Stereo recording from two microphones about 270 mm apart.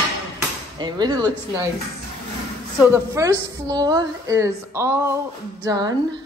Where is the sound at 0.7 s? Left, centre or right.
Centre.